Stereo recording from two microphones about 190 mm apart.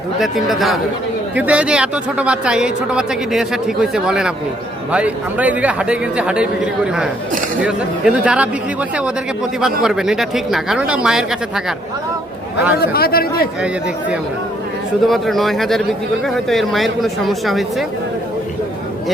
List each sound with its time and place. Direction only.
0.2 s a man's voice: centre (ahead or behind)
7.6 s a man's voice: 5° right (ahead or behind)
12.9 s speech: 55° left (ahead or behind)
15.0 s a man's voice: centre (ahead or behind)